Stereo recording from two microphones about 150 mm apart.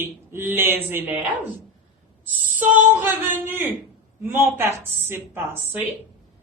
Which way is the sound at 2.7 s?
10° right (ahead or behind).